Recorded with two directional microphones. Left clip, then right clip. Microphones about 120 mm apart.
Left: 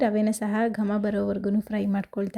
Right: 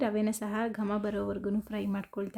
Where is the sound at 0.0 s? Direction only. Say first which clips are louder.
Left 7 dB; 30° left (ahead or behind).